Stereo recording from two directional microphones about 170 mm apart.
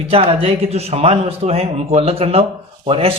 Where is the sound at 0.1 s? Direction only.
35° right (ahead or behind).